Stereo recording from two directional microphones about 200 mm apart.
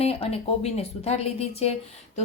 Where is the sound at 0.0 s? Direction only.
30° left (ahead or behind).